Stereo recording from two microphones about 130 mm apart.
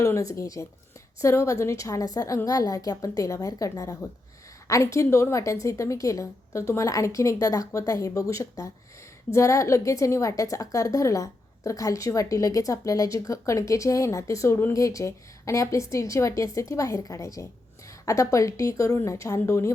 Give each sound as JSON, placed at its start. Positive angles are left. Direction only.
{"t": 0.0, "sound": "a woman's voice", "side_deg": 25}